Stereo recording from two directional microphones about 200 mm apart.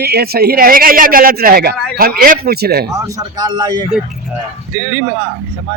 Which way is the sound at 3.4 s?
20° right (ahead or behind).